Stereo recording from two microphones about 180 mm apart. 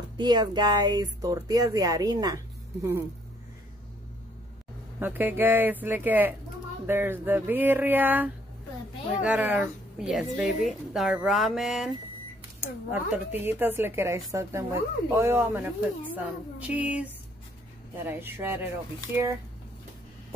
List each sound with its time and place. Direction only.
0.2 s speech: 25° right (ahead or behind)
5.0 s a woman's voice: 10° right (ahead or behind)